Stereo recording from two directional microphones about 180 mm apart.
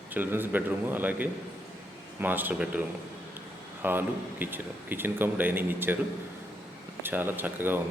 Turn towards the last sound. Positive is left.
turn(degrees=-10)  # may be behind; listen again after turning